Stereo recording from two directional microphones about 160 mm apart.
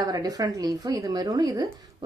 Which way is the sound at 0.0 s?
25° right (ahead or behind).